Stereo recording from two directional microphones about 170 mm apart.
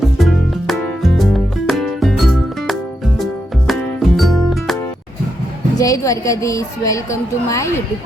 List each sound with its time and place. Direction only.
0.0 s music: centre (ahead or behind)
5.7 s a woman's voice: 20° left (ahead or behind)